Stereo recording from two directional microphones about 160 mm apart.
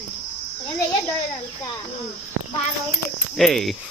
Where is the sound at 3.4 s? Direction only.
Centre (ahead or behind).